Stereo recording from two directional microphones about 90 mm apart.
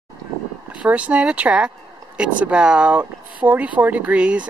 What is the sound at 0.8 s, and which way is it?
Speech, 15° right (ahead or behind).